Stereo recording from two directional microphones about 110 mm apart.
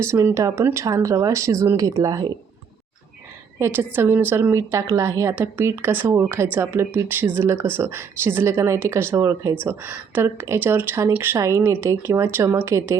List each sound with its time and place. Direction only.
0.0 s a woman's voice: 25° right (ahead or behind)
3.6 s a woman's voice: 20° right (ahead or behind)